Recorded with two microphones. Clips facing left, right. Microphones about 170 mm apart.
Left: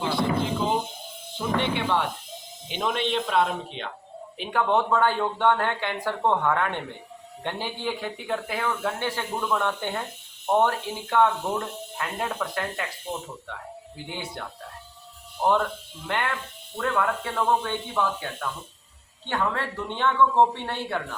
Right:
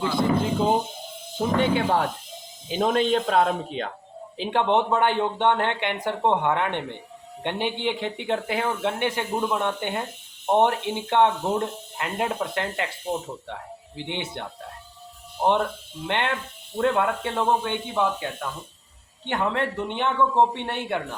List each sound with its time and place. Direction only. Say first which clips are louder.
1.4 s speech: right 4 dB; 45° right (ahead or behind)
4.4 s speech: right 2 dB; 25° right (ahead or behind)